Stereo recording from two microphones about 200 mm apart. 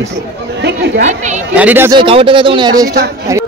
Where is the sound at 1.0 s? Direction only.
35° right (ahead or behind).